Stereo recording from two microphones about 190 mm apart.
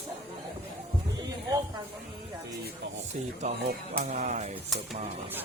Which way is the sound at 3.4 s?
40° right (ahead or behind).